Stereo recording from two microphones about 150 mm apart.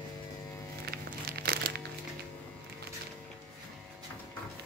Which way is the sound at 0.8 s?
90° right.